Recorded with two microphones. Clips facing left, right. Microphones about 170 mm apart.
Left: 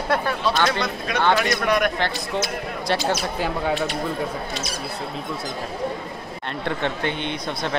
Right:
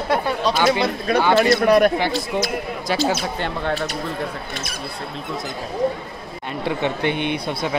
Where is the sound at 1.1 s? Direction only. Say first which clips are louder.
Right 5 dB; 30° right (ahead or behind).